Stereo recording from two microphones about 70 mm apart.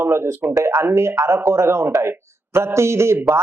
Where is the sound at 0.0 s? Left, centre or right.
Right.